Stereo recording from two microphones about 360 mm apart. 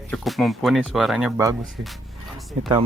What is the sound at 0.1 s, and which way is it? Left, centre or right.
Speech, centre.